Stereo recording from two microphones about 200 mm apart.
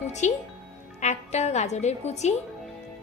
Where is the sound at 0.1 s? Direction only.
35° left (ahead or behind).